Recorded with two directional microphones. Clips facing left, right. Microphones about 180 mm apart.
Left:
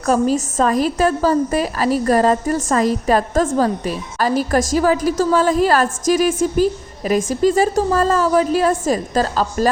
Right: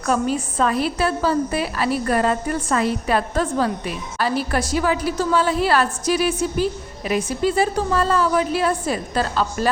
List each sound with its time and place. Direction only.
0.0 s a woman's voice: 40° left (ahead or behind)